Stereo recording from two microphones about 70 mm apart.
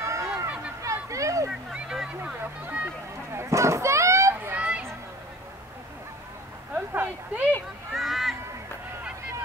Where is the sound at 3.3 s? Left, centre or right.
Right.